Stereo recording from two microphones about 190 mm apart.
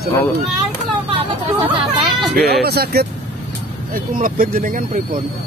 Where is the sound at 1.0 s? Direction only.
30° right (ahead or behind).